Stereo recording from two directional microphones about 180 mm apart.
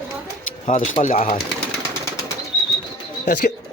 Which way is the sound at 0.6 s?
35° left (ahead or behind).